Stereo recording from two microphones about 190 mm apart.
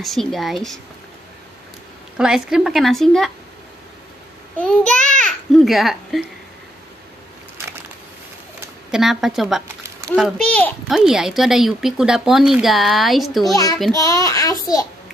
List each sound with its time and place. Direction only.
0.0 s speech: centre (ahead or behind)
2.1 s speech: 5° right (ahead or behind)
4.6 s a child's voice: 5° left (ahead or behind)
7.6 s a sound: 15° right (ahead or behind)
8.9 s speech: centre (ahead or behind)
13.9 s a child's voice: 15° left (ahead or behind)